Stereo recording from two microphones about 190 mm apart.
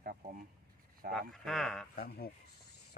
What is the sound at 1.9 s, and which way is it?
Speech, 50° left (ahead or behind).